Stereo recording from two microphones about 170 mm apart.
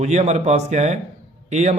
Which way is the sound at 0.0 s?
40° right (ahead or behind).